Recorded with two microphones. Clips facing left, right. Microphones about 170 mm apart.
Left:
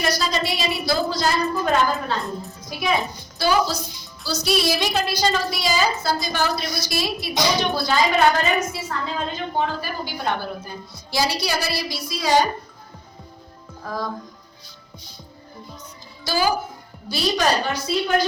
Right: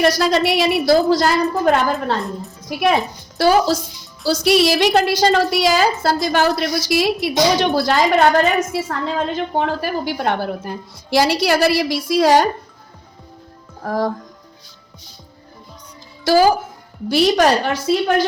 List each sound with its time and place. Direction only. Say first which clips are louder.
0.0 s a woman's voice: right 8 dB; 70° right (ahead or behind)
3.3 s a woman's voice: right 6 dB; 85° right
13.8 s a woman's voice: right 8 dB; 75° right (ahead or behind)
16.2 s a woman's voice: right 8 dB; 85° right